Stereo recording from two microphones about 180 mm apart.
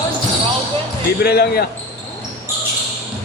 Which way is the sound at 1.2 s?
60° left (ahead or behind).